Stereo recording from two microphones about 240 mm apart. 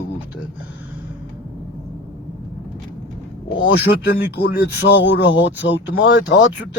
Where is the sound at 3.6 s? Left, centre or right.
Left.